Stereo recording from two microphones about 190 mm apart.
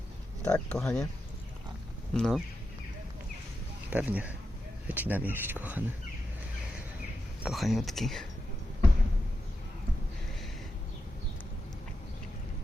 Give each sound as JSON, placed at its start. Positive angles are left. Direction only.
{"t": 0.4, "sound": "speech", "side_deg": 5}
{"t": 2.1, "sound": "speech", "side_deg": 5}
{"t": 3.8, "sound": "speech", "side_deg": -5}
{"t": 7.4, "sound": "speech", "side_deg": 0}